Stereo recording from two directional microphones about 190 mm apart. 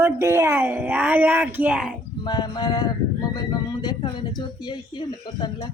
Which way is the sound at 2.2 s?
20° left (ahead or behind).